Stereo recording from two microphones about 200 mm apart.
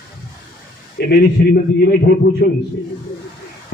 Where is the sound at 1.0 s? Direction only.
55° left (ahead or behind).